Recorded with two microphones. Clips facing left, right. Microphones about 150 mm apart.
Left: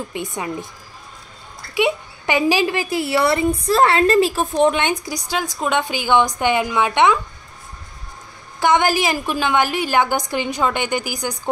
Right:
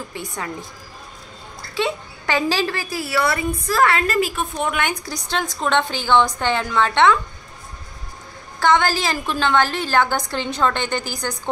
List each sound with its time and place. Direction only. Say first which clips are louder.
0.1 s speech: left 4 dB; 20° left (ahead or behind)
1.8 s speech: left 4 dB; 15° left (ahead or behind)
5.0 s a woman's voice: left 1 dB; 15° left (ahead or behind)
8.5 s a woman's voice: left 1 dB; 15° left (ahead or behind)